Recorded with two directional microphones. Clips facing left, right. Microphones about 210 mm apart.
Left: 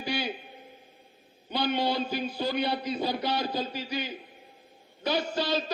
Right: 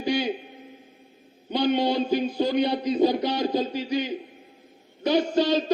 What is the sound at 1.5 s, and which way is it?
A man's voice, 15° right (ahead or behind).